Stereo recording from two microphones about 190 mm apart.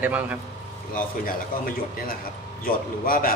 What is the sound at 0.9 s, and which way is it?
A man's voice, 50° left (ahead or behind).